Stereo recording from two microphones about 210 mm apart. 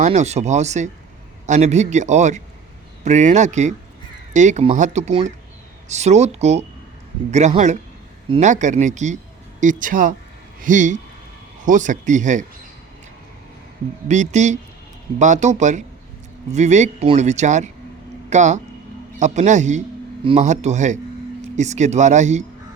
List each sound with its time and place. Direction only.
0.0 s speech: 30° right (ahead or behind)
14.1 s speech: 35° right (ahead or behind)